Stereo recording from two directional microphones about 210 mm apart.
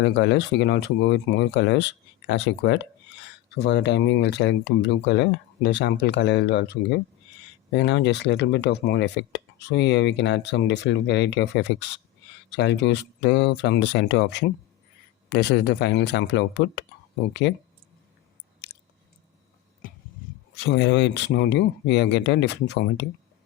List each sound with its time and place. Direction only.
0.0 s speech: 55° left (ahead or behind)
20.6 s speech: 55° left (ahead or behind)